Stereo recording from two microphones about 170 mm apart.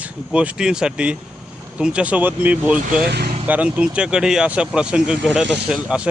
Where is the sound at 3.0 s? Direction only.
70° right (ahead or behind).